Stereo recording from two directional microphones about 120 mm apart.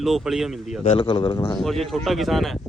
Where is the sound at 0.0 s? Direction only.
5° right (ahead or behind).